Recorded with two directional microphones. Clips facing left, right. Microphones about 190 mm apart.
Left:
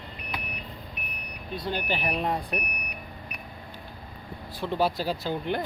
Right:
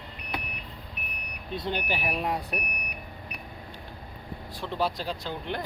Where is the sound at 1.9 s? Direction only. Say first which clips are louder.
Left 3 dB; 5° right (ahead or behind).